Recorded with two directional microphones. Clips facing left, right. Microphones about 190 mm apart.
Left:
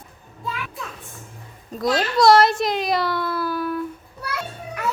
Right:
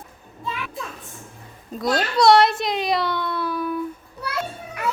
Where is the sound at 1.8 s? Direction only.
Centre (ahead or behind).